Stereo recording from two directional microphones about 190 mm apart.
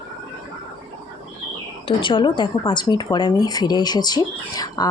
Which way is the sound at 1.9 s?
25° left (ahead or behind).